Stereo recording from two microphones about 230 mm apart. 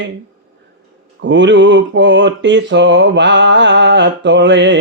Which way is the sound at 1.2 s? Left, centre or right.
Right.